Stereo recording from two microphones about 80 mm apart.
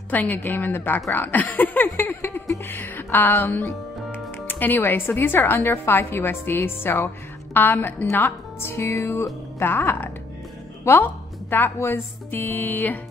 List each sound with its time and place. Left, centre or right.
0.1 s speech: left
2.6 s music: left
3.3 s a woman's voice: left